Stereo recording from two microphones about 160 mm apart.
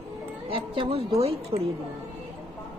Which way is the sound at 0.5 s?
35° right (ahead or behind).